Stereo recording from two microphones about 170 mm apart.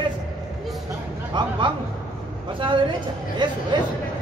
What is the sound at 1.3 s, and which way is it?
Speech, 25° right (ahead or behind).